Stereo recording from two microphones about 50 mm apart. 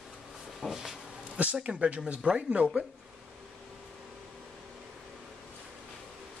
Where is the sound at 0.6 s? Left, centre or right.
Centre.